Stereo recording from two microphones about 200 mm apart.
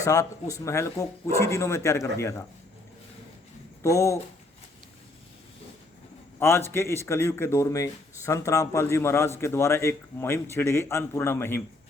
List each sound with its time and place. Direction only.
0.0 s speech: 15° left (ahead or behind)
3.8 s speech: 15° left (ahead or behind)
6.4 s speech: 10° left (ahead or behind)